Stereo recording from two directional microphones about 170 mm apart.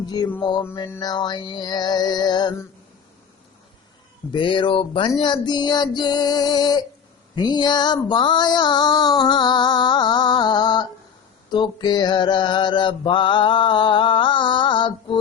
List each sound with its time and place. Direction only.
0.0 s mantra: 25° left (ahead or behind)
4.3 s mantra: 30° left (ahead or behind)